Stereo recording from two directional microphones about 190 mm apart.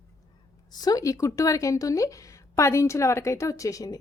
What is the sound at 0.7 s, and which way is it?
A woman's voice, 20° left (ahead or behind).